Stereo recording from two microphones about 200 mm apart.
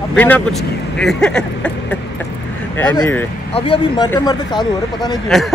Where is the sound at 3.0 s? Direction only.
10° left (ahead or behind).